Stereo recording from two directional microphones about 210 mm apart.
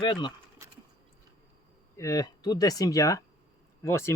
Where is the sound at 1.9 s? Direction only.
15° left (ahead or behind).